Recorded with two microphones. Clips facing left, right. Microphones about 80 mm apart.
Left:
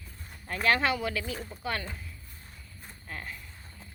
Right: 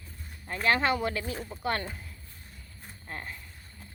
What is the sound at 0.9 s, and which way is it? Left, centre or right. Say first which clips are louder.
Speech: right 2 dB; right.